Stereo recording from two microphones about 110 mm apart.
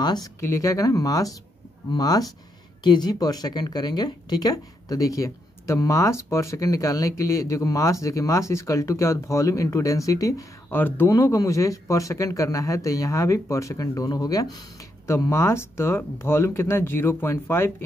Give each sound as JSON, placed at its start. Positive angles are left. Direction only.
{"t": 0.0, "sound": "speech", "side_deg": 40}
{"t": 0.4, "sound": "speech", "side_deg": 25}
{"t": 10.7, "sound": "speech", "side_deg": 20}